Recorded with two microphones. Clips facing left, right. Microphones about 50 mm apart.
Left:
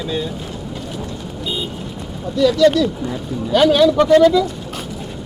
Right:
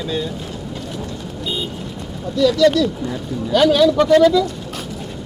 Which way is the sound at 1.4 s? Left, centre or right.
Centre.